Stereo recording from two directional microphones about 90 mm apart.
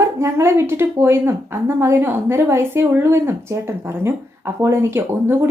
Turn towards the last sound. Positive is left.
turn(degrees=-25)  # may be behind; listen again after turning